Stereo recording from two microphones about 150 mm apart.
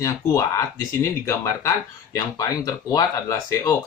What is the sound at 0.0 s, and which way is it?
Speech, 20° left (ahead or behind).